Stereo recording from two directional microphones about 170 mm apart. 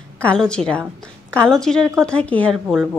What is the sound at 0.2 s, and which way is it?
Speech, 5° left (ahead or behind).